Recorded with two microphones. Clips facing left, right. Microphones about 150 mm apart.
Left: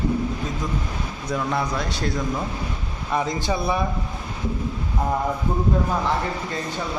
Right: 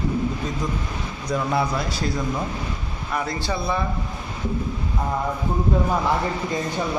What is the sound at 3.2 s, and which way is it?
Speech, 15° left (ahead or behind).